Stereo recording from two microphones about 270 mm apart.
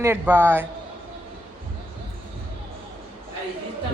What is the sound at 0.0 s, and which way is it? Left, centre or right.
Speech, centre.